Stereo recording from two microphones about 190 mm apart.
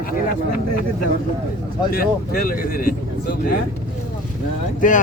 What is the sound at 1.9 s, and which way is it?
Speech, 50° left (ahead or behind).